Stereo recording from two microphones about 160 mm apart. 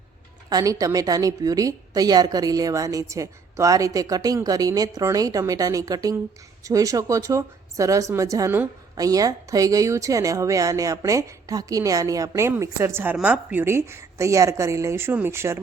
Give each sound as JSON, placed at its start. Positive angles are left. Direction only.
{"t": 0.5, "sound": "a woman's voice", "side_deg": -20}